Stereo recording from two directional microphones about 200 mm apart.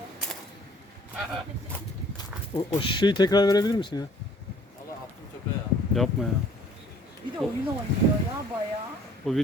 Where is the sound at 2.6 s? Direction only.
20° left (ahead or behind).